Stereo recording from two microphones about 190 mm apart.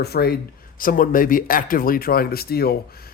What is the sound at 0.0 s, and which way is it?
Speech, 55° left (ahead or behind).